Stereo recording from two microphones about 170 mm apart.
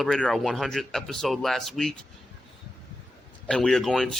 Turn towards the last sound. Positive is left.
turn(degrees=5)  # may be behind; listen again after turning